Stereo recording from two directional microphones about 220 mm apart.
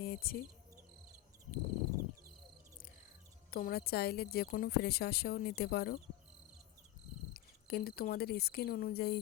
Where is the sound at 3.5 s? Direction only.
45° left (ahead or behind).